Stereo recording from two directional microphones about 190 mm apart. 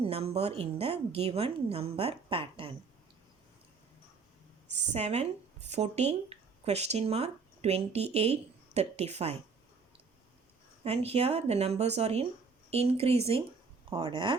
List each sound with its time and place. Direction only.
0.0 s a woman's voice: 30° right (ahead or behind)
4.9 s speech: 35° right (ahead or behind)
10.8 s a woman's voice: 30° right (ahead or behind)